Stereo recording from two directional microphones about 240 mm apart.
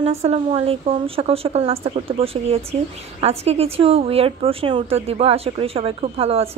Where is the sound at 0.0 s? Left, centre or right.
Right.